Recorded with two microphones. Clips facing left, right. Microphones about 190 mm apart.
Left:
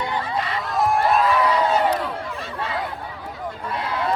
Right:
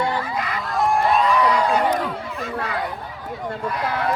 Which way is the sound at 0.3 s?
30° left (ahead or behind).